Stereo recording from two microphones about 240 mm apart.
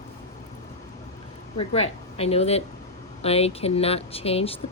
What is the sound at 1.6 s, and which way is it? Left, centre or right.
A woman's voice, left.